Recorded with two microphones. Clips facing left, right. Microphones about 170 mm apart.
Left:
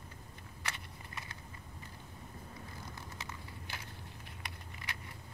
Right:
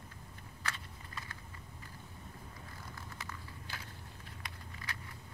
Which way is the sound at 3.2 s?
20° left (ahead or behind).